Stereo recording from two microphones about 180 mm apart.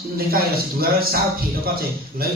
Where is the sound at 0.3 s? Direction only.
55° right (ahead or behind).